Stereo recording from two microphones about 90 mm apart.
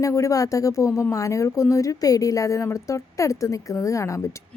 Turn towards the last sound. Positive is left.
turn(degrees=35)  # may be behind; listen again after turning